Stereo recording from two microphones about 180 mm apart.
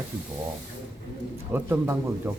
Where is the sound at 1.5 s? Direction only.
10° right (ahead or behind).